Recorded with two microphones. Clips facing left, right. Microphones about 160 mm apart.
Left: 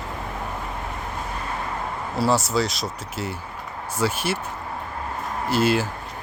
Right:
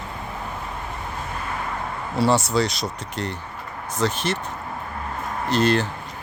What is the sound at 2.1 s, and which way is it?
Speech, centre (ahead or behind).